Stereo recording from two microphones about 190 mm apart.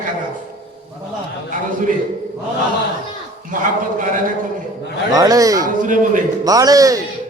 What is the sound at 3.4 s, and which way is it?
A man's voice, 45° right (ahead or behind).